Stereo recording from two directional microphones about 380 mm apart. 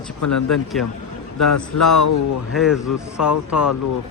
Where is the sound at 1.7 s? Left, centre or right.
Left.